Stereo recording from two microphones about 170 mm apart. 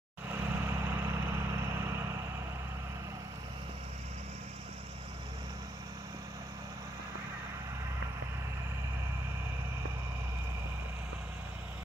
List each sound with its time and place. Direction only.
0.3 s vehicle: 15° right (ahead or behind)